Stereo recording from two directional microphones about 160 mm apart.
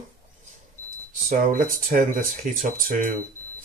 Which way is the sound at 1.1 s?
60° right (ahead or behind).